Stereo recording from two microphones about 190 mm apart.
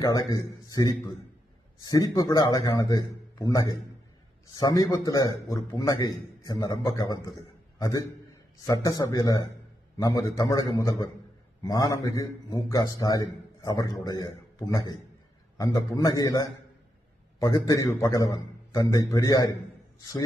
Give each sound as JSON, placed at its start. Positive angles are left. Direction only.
{"t": 0.0, "sound": "a man's voice", "side_deg": 20}
{"t": 8.6, "sound": "a man's voice", "side_deg": 20}